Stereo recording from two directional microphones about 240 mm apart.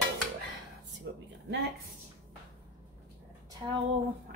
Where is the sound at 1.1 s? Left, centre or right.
Right.